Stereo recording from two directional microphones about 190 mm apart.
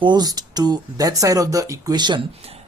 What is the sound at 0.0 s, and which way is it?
Speech, 20° right (ahead or behind).